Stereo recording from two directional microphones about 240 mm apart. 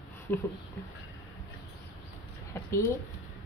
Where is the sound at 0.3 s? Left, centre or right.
Centre.